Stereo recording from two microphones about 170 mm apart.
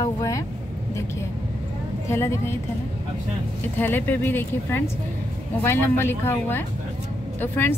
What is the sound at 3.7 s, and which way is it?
A woman's voice, 10° left (ahead or behind).